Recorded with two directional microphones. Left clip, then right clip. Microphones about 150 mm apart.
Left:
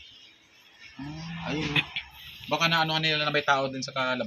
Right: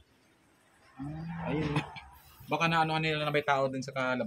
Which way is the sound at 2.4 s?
10° left (ahead or behind).